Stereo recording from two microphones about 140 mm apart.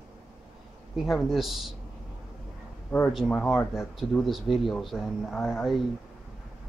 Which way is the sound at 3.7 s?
Centre (ahead or behind).